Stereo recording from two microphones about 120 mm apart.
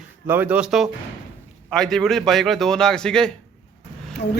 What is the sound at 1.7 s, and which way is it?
A man's voice, 5° left (ahead or behind).